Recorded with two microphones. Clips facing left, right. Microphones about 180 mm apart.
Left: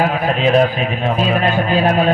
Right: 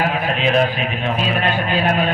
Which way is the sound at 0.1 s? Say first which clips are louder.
Left 4 dB; 40° left (ahead or behind).